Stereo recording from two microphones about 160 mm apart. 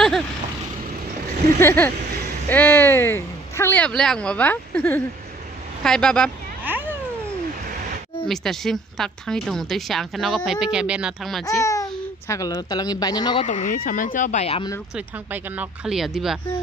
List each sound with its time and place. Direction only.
1.6 s a man's voice: 15° left (ahead or behind)
6.6 s a sound: 10° right (ahead or behind)
8.3 s a woman's voice: centre (ahead or behind)
11.6 s babbling: 20° left (ahead or behind)
12.3 s a woman's voice: 20° left (ahead or behind)
13.5 s speech: 50° left (ahead or behind)
15.0 s a woman's voice: 10° right (ahead or behind)